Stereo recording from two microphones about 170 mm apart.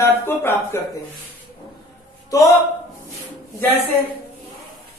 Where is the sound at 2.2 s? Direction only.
20° left (ahead or behind).